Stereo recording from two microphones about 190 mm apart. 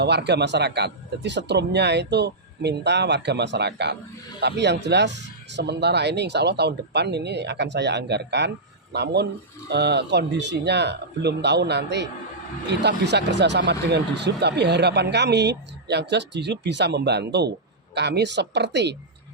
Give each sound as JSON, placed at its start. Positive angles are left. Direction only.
{"t": 0.0, "sound": "speech", "side_deg": -60}